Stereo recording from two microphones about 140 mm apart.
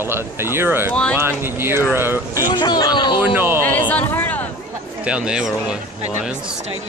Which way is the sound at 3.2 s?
15° right (ahead or behind).